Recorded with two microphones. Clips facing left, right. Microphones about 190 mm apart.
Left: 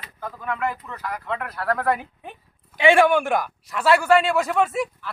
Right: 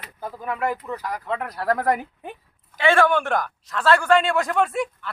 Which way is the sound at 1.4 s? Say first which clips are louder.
Right 1 dB; 40° right (ahead or behind).